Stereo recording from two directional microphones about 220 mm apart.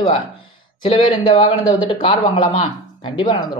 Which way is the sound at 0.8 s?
20° left (ahead or behind).